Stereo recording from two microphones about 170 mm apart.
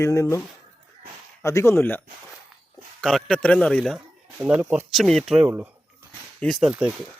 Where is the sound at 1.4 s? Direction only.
15° left (ahead or behind).